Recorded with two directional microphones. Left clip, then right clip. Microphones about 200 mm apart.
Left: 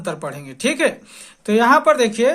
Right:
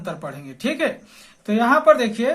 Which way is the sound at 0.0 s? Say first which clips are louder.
Left 4 dB; 40° left (ahead or behind).